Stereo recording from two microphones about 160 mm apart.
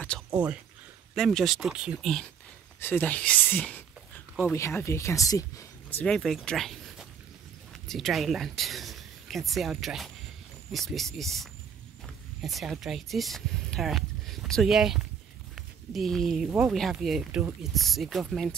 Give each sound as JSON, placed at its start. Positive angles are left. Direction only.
{"t": 1.1, "sound": "speech", "side_deg": 0}
{"t": 2.8, "sound": "speech", "side_deg": 10}
{"t": 5.9, "sound": "speech", "side_deg": 5}